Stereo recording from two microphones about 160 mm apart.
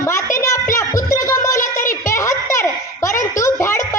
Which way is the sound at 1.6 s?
55° left (ahead or behind).